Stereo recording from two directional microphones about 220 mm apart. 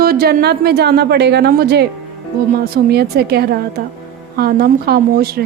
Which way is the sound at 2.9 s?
45° right (ahead or behind).